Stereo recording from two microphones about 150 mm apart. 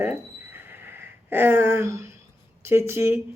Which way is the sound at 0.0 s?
15° right (ahead or behind).